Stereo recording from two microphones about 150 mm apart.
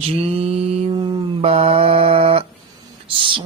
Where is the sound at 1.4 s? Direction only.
40° right (ahead or behind).